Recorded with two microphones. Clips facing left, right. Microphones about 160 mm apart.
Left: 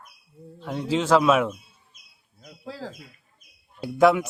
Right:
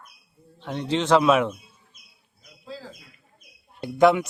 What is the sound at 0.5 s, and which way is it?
A man's voice, 5° left (ahead or behind).